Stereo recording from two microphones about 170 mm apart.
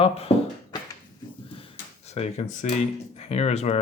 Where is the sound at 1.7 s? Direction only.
40° left (ahead or behind).